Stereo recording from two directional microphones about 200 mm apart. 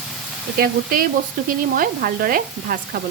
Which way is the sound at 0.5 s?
45° right (ahead or behind).